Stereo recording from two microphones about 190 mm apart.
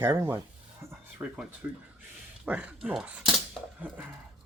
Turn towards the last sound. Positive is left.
turn(degrees=-5)  # may be behind; listen again after turning